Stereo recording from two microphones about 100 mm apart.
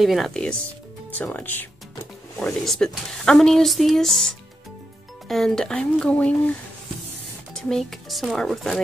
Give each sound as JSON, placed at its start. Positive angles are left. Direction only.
{"t": 0.0, "sound": "speech", "side_deg": 0}
{"t": 1.1, "sound": "speech", "side_deg": 15}
{"t": 2.4, "sound": "speech", "side_deg": 5}
{"t": 7.5, "sound": "speech", "side_deg": 5}